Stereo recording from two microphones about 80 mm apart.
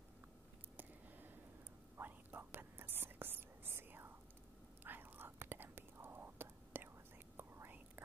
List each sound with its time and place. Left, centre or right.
2.0 s whispering: right